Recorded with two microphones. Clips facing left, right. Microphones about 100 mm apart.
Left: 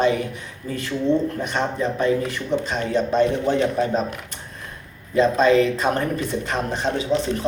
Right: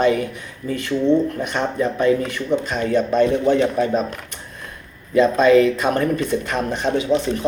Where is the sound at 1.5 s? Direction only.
30° left (ahead or behind).